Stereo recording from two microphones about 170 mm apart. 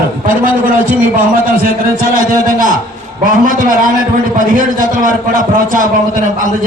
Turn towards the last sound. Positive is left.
turn(degrees=-55)  # may be behind; listen again after turning